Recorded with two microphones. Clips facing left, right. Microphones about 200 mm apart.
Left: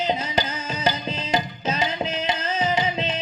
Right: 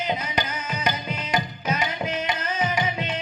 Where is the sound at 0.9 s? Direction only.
25° left (ahead or behind).